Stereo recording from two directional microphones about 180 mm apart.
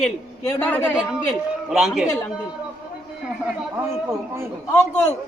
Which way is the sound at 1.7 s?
Centre (ahead or behind).